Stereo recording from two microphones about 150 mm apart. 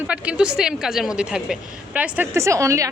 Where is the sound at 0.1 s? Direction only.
5° right (ahead or behind).